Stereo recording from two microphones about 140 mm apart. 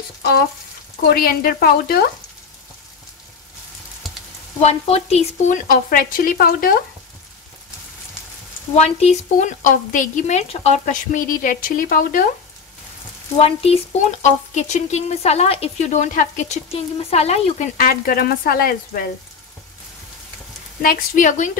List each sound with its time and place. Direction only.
1.1 s speech: 90° left
4.6 s speech: 45° left (ahead or behind)
5.5 s speech: 85° left
8.7 s a woman's voice: 50° left (ahead or behind); by 12.3 s 85° left
13.4 s speech: 45° left (ahead or behind); by 16.5 s 65° left (ahead or behind)
16.7 s speech: 50° left (ahead or behind)
17.7 s speech: 90° left
20.8 s a woman's voice: 80° left; by 21.5 s 65° left (ahead or behind)